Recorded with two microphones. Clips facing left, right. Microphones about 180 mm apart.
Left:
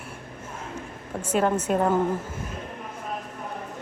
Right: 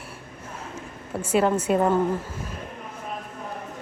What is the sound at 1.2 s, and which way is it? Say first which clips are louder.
Speech: right 2 dB; 10° right (ahead or behind).